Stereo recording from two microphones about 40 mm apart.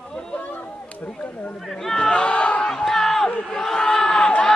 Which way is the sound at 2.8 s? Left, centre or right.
Centre.